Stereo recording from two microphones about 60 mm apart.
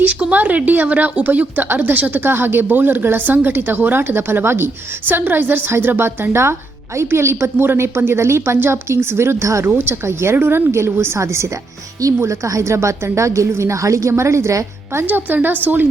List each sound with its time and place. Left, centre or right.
0.0 s a woman's voice: right
7.0 s a woman's voice: right
15.0 s a woman's voice: right